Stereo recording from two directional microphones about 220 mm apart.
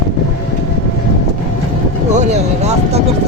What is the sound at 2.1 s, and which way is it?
Vehicle, 30° right (ahead or behind).